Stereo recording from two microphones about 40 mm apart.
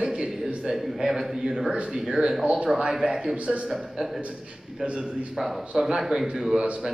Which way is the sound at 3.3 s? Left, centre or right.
Right.